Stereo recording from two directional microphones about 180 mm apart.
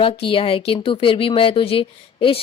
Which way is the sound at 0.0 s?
30° left (ahead or behind).